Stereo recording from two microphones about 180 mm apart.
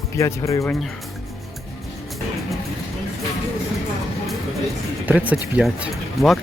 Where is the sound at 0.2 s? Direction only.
15° left (ahead or behind).